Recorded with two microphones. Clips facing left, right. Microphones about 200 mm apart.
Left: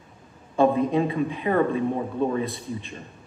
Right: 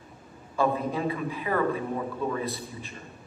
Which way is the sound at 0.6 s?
25° left (ahead or behind).